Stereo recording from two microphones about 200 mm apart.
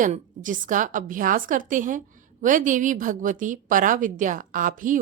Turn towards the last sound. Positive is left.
turn(degrees=-40)  # may be behind; listen again after turning